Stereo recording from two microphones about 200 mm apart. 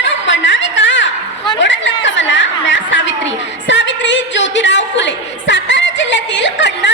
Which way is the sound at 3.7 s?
65° left (ahead or behind).